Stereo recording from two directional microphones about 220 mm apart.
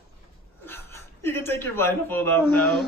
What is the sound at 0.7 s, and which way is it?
Speech, 10° left (ahead or behind).